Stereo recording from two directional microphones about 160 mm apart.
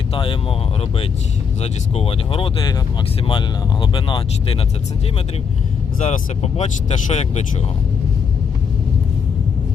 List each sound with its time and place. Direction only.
0.1 s speech: 30° left (ahead or behind)
1.6 s speech: 35° left (ahead or behind)
6.0 s speech: 45° left (ahead or behind)